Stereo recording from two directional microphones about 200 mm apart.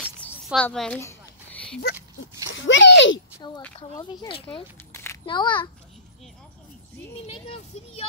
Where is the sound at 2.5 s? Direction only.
70° left (ahead or behind).